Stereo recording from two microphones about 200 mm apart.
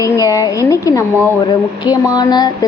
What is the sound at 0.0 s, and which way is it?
A woman's voice, 15° left (ahead or behind).